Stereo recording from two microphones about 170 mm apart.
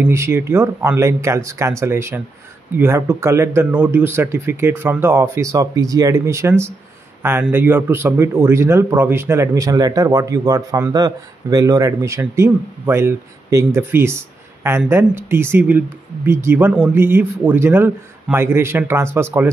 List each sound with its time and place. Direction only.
0.0 s speech: 15° right (ahead or behind)